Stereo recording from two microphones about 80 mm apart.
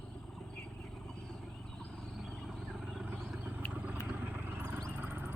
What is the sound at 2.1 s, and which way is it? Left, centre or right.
Vehicle, centre.